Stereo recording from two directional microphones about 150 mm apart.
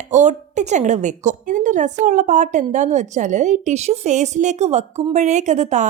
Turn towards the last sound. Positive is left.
turn(degrees=-50)  # may be behind; listen again after turning